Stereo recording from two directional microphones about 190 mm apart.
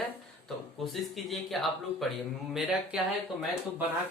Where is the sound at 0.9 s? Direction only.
Centre (ahead or behind).